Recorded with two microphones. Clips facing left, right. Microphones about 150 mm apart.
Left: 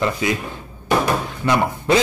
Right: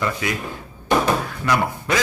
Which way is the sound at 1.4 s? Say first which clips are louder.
Left 4 dB; 25° left (ahead or behind).